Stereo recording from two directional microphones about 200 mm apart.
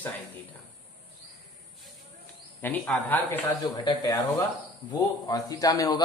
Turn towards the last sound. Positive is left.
turn(degrees=15)  # may be behind; listen again after turning